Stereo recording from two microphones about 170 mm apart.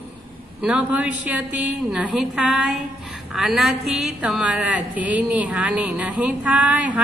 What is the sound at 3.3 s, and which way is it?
A woman's voice, centre (ahead or behind).